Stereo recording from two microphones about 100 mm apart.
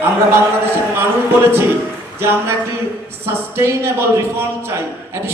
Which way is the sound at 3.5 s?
25° right (ahead or behind).